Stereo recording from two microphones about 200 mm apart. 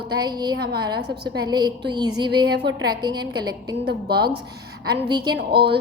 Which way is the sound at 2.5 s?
55° right (ahead or behind).